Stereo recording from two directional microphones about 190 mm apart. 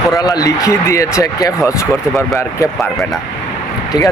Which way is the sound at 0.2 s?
20° left (ahead or behind).